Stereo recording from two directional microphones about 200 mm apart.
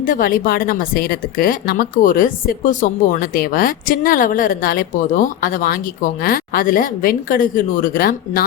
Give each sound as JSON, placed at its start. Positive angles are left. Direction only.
{"t": 0.0, "sound": "a woman's voice", "side_deg": 45}